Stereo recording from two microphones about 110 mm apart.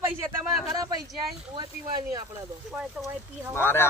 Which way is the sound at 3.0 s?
10° right (ahead or behind).